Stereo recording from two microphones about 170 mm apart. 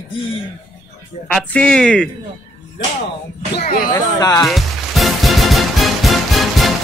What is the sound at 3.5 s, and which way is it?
Speech, 65° left (ahead or behind).